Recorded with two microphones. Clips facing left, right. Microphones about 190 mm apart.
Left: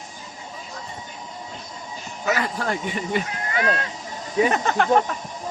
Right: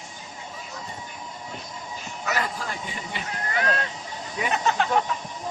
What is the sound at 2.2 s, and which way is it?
Speech, 70° left (ahead or behind).